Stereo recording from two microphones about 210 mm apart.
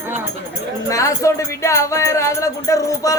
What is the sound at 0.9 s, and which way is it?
Music, 15° left (ahead or behind).